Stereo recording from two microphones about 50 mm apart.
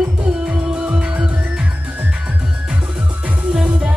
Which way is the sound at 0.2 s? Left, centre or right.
Right.